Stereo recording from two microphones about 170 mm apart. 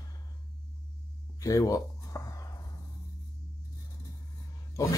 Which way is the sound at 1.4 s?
20° left (ahead or behind).